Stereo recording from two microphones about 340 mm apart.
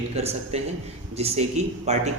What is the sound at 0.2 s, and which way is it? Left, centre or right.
A man's voice, centre.